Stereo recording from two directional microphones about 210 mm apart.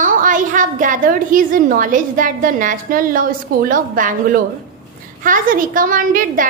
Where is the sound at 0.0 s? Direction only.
40° right (ahead or behind).